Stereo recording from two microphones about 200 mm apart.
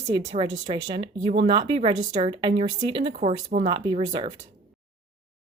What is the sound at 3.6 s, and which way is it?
Speech, 20° right (ahead or behind).